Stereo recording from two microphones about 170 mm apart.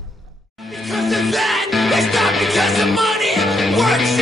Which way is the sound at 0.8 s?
Centre (ahead or behind).